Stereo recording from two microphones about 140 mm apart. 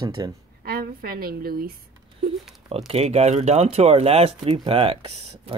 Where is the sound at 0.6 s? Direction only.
90° right.